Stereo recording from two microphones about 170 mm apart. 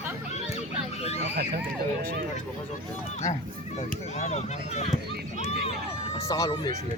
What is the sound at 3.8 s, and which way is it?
Speech, 40° left (ahead or behind).